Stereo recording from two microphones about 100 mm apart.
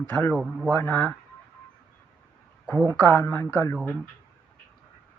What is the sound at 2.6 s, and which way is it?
Speech, 15° left (ahead or behind).